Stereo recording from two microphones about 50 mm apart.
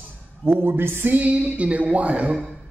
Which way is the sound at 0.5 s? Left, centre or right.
Right.